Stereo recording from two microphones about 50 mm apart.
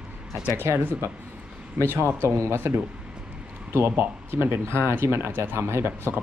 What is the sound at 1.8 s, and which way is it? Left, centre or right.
Speech, right.